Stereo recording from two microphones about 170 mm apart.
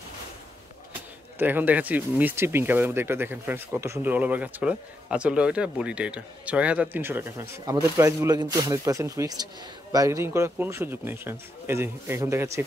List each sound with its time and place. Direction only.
1.4 s speech: 10° right (ahead or behind)